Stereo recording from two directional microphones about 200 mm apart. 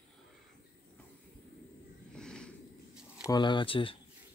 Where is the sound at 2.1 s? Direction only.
5° left (ahead or behind).